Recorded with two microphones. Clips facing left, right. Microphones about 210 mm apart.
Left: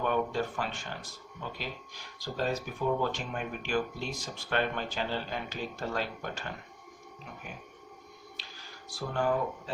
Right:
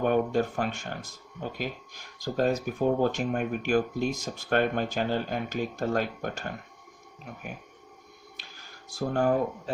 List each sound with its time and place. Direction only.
0.0 s speech: 45° right (ahead or behind)
9.0 s speech: 45° right (ahead or behind)